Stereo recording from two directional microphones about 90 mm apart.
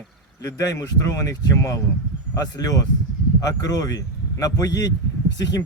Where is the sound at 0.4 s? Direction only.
40° left (ahead or behind).